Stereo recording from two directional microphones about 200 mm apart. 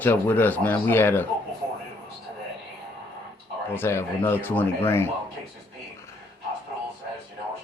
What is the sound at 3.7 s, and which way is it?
Speech, 10° left (ahead or behind).